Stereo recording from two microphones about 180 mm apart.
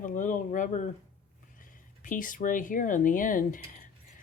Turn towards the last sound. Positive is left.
turn(degrees=45)  # may be behind; listen again after turning